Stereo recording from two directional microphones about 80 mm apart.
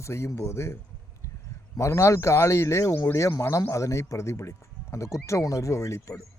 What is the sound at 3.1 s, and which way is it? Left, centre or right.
Speech, left.